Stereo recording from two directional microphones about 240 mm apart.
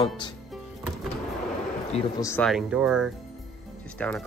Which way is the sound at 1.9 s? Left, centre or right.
Left.